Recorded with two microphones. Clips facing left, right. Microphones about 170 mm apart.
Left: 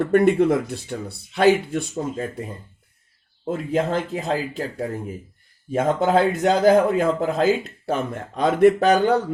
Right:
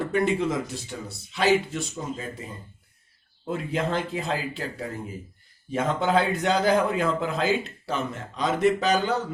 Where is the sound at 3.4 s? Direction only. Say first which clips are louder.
Left 5 dB; 45° left (ahead or behind).